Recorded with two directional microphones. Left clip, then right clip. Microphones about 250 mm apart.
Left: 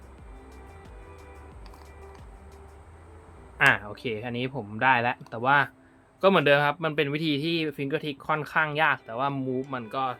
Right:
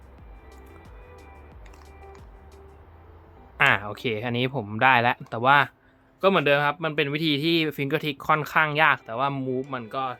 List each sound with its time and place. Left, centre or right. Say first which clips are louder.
3.6 s speech: right 1 dB; right
6.1 s speech: even; centre